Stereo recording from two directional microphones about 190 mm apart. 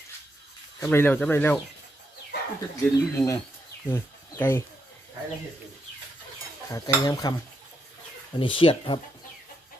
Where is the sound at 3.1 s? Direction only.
15° left (ahead or behind).